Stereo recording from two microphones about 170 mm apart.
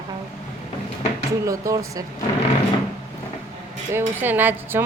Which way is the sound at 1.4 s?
20° right (ahead or behind).